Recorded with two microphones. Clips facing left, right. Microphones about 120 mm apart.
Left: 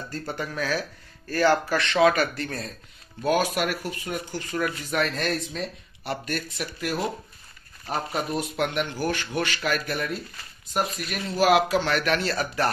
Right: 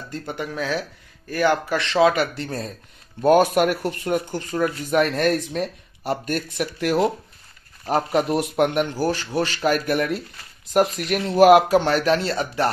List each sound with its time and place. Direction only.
0.1 s speech: 15° right (ahead or behind); by 2.7 s 30° right (ahead or behind)
3.2 s speech: 50° right (ahead or behind); by 8.5 s 70° right (ahead or behind)
8.5 s speech: 45° right (ahead or behind); by 12.6 s 25° right (ahead or behind)